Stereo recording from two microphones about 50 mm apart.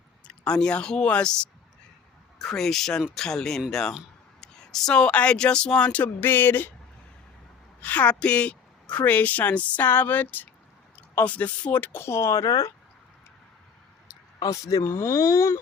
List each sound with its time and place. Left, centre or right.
0.3 s speech: centre
2.4 s speech: centre
4.4 s a sound: centre
4.9 s speech: left
7.8 s a woman's voice: left
9.8 s a woman's voice: left
11.9 s speech: left
14.5 s speech: left